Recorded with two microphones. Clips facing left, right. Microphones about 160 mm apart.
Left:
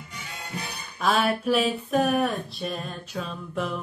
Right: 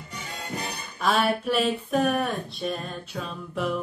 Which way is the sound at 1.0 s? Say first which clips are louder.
Even; centre (ahead or behind).